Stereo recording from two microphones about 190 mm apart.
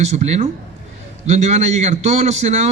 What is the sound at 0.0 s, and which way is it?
A man's voice, 35° right (ahead or behind).